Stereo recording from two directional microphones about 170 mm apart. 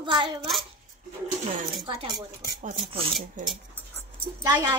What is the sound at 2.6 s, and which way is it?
Speech, 45° right (ahead or behind).